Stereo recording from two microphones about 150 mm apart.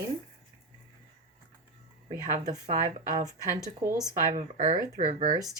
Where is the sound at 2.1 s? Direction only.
60° right (ahead or behind).